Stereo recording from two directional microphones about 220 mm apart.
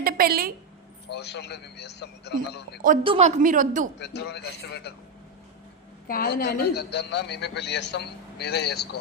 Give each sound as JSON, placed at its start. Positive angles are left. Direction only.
{"t": 0.0, "sound": "a woman's voice", "side_deg": -40}
{"t": 1.1, "sound": "a man's voice", "side_deg": 50}
{"t": 3.0, "sound": "a woman's voice", "side_deg": -25}
{"t": 4.0, "sound": "a man's voice", "side_deg": 50}
{"t": 6.1, "sound": "a man's voice", "side_deg": 45}